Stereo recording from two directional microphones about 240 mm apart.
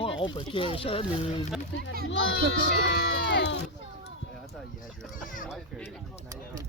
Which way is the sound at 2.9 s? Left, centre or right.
Left.